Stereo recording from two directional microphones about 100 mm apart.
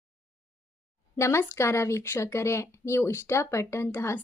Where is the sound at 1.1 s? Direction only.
25° left (ahead or behind).